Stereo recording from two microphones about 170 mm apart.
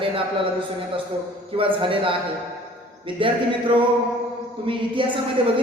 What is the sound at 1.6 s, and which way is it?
Speech, 30° right (ahead or behind).